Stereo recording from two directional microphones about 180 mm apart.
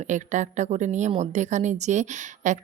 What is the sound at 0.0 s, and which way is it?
A woman's voice, 45° right (ahead or behind).